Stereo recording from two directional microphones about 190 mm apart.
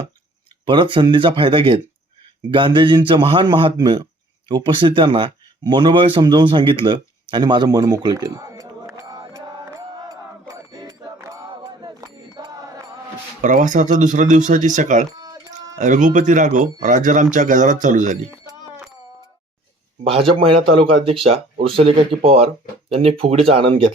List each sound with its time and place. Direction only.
0.6 s speech: 25° right (ahead or behind)
4.4 s a sound: 25° right (ahead or behind)
13.4 s speech: 40° right (ahead or behind)
15.2 s a sound: 20° right (ahead or behind)
15.8 s speech: 40° right (ahead or behind)
20.1 s speech: 30° right (ahead or behind)